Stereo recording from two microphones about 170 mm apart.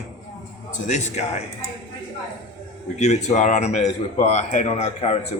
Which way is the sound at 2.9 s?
40° left (ahead or behind).